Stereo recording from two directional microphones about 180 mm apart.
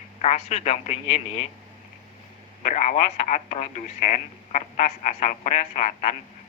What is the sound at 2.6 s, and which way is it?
Speech, 40° left (ahead or behind).